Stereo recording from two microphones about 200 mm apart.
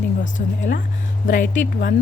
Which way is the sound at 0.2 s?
40° left (ahead or behind).